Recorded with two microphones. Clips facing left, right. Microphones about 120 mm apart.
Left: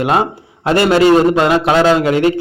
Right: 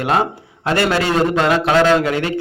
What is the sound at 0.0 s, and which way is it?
A man's voice, 15° left (ahead or behind).